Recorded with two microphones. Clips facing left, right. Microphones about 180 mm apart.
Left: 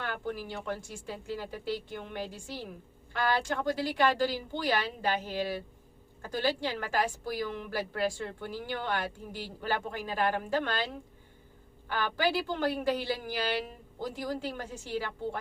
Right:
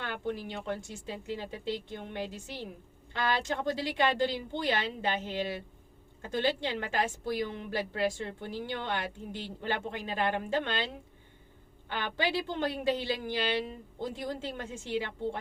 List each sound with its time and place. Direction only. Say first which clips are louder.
0.0 s a woman's voice: right 1 dB; 20° right (ahead or behind)
11.9 s a woman's voice: left 2 dB; 20° right (ahead or behind)